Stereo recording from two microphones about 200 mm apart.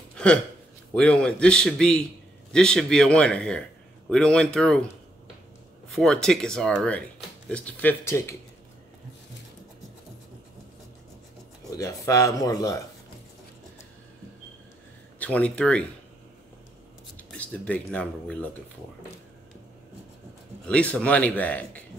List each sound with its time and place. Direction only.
0.1 s a sound: 5° left (ahead or behind)
0.9 s speech: 5° left (ahead or behind)
5.9 s speech: centre (ahead or behind)
11.7 s a man's voice: 15° left (ahead or behind)
15.1 s a man's voice: 5° left (ahead or behind)
17.2 s speech: 5° left (ahead or behind)
20.6 s a man's voice: 5° left (ahead or behind)